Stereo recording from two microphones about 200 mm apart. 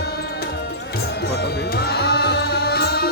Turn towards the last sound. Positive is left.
turn(degrees=50)  # may be behind; listen again after turning